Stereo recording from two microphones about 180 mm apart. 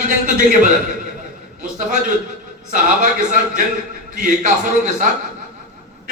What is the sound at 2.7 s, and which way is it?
A man's voice, 45° right (ahead or behind).